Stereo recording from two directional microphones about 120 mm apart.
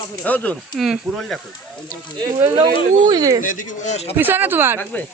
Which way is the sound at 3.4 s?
90° left.